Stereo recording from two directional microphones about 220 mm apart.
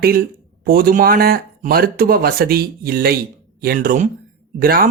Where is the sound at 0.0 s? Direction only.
40° right (ahead or behind).